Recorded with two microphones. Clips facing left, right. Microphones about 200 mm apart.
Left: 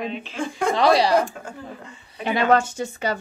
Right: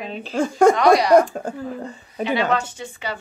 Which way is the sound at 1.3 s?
40° right (ahead or behind).